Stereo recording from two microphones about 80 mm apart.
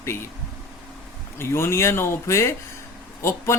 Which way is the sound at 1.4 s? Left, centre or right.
Left.